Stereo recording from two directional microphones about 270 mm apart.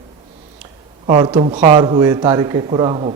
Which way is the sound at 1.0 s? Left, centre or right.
Centre.